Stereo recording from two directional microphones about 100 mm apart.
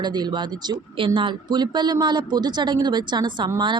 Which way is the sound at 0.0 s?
45° right (ahead or behind).